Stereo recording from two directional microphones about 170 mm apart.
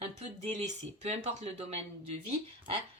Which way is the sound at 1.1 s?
40° right (ahead or behind).